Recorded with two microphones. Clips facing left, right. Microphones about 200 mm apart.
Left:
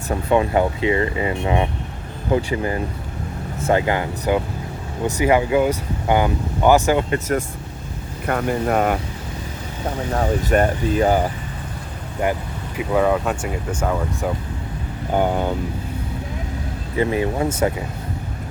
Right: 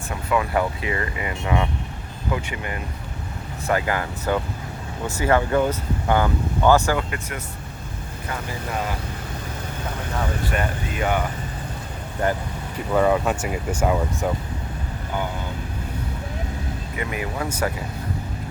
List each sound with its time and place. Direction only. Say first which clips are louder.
0.1 s speech: left 5 dB; 30° left (ahead or behind)
2.3 s speech: left 9 dB; 30° left (ahead or behind)
7.1 s speech: left 11 dB; 45° left (ahead or behind)
8.3 s speech: left 11 dB; 60° left (ahead or behind)
10.2 s speech: left 8 dB; 40° left (ahead or behind)
12.2 s speech: left 2 dB; 10° left (ahead or behind); by 14.3 s 10° right (ahead or behind)
15.1 s speech: left 10 dB; 55° left (ahead or behind)
16.9 s speech: left 10 dB; 30° left (ahead or behind)